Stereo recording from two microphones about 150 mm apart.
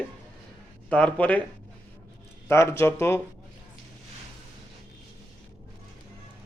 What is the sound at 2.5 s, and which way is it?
Speech, 15° left (ahead or behind).